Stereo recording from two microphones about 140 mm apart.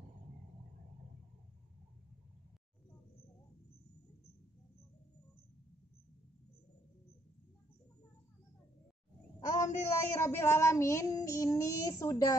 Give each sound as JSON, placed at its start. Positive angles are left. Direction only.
{"t": 9.4, "sound": "child singing", "side_deg": 25}